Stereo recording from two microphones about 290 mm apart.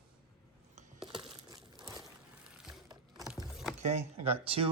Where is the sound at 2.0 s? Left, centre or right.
Centre.